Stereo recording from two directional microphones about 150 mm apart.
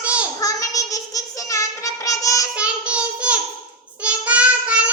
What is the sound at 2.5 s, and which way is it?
Child singing, 10° right (ahead or behind).